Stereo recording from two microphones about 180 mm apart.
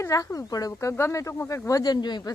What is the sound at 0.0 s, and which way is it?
Speech, 15° left (ahead or behind).